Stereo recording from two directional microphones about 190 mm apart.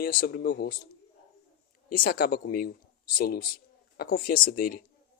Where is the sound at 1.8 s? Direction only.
50° left (ahead or behind).